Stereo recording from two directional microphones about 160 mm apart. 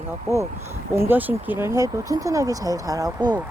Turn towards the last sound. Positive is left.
turn(degrees=-25)  # may be behind; listen again after turning